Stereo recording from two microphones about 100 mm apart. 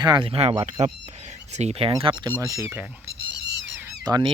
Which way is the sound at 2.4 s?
30° right (ahead or behind).